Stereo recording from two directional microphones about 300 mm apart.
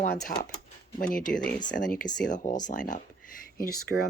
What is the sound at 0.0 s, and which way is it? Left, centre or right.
Speech, left.